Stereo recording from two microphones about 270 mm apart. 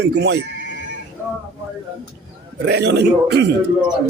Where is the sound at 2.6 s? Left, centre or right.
Right.